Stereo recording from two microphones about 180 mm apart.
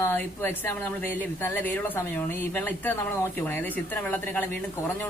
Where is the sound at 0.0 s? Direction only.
10° left (ahead or behind).